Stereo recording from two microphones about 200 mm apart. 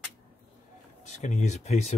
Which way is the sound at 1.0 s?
35° left (ahead or behind).